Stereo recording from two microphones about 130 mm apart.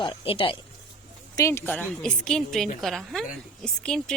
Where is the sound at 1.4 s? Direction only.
20° left (ahead or behind).